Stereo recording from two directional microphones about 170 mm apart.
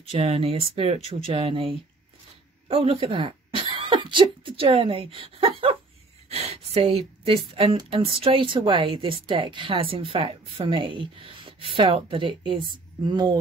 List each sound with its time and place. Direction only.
0.1 s a woman's voice: 35° right (ahead or behind)
5.2 s a sound: 30° right (ahead or behind)
6.2 s a woman's voice: 40° right (ahead or behind)